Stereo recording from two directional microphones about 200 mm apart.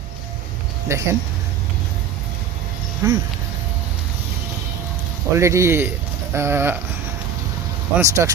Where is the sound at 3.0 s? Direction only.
15° right (ahead or behind).